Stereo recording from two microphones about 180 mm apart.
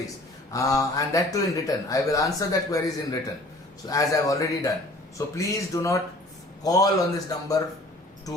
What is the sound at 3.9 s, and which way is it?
A man's voice, 20° left (ahead or behind).